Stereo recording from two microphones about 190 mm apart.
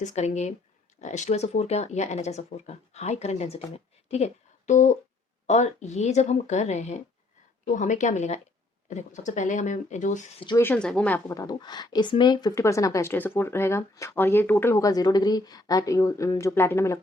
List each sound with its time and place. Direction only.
0.0 s a woman's voice: 40° left (ahead or behind)
10.6 s a woman's voice: 5° left (ahead or behind)